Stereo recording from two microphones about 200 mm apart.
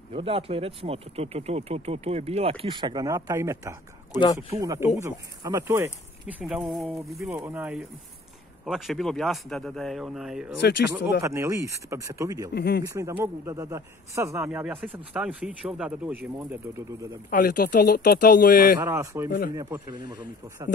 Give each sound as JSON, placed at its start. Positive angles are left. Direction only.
{"t": 0.1, "sound": "a man's voice", "side_deg": -30}
{"t": 6.2, "sound": "speech", "side_deg": 0}
{"t": 7.2, "sound": "a man's voice", "side_deg": -10}
{"t": 11.1, "sound": "a man's voice", "side_deg": -15}
{"t": 12.5, "sound": "speech", "side_deg": 55}
{"t": 12.8, "sound": "a man's voice", "side_deg": -15}
{"t": 17.3, "sound": "speech", "side_deg": 45}
{"t": 18.8, "sound": "a man's voice", "side_deg": -15}